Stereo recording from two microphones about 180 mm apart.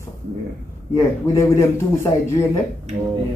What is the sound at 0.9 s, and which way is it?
Speech, 15° left (ahead or behind).